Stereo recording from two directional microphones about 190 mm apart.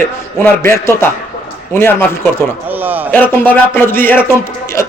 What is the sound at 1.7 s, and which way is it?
Speech, 15° left (ahead or behind).